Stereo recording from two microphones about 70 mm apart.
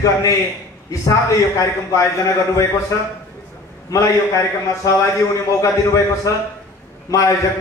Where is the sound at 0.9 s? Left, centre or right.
Left.